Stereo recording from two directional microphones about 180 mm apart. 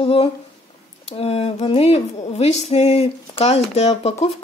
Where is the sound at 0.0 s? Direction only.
30° left (ahead or behind).